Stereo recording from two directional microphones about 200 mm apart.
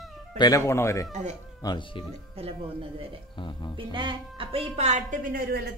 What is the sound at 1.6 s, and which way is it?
Speech, 25° left (ahead or behind).